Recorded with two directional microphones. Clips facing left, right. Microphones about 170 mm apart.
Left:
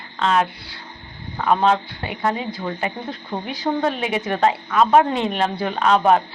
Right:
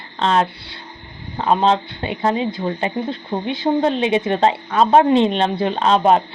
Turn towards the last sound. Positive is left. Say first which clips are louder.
# right 2 dB
turn(degrees=-25)  # may be behind; listen again after turning